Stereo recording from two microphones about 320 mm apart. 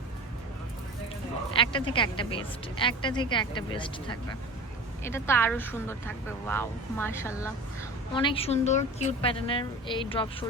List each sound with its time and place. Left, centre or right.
1.5 s a woman's voice: centre